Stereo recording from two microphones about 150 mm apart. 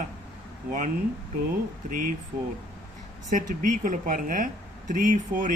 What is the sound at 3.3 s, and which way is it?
Speech, 60° right (ahead or behind).